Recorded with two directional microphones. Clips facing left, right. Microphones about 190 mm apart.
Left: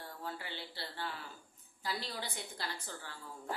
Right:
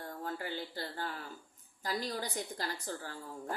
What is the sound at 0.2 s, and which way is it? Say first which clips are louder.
A woman's voice: right 5 dB; 45° right (ahead or behind).